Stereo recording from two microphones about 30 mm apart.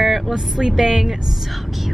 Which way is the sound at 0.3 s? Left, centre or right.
Right.